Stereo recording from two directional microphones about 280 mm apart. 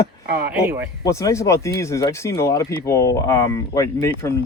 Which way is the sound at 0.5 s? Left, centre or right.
Centre.